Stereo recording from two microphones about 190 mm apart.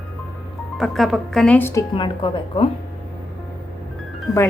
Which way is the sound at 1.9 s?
25° left (ahead or behind).